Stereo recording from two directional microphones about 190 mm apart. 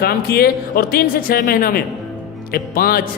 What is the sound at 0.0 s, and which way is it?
A man's voice, 55° left (ahead or behind).